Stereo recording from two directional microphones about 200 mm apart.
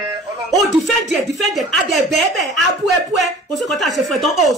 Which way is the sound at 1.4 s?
Centre (ahead or behind).